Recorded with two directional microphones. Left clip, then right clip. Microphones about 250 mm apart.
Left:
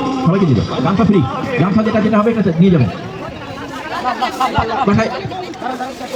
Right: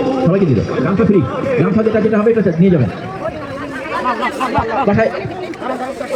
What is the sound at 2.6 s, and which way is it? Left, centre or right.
Speech, left.